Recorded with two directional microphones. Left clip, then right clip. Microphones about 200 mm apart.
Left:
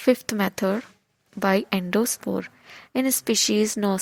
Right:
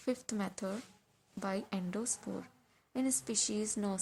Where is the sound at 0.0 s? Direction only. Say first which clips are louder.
Left 17 dB; 35° left (ahead or behind).